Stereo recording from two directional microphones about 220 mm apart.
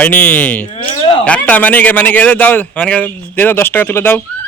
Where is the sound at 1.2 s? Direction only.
5° left (ahead or behind).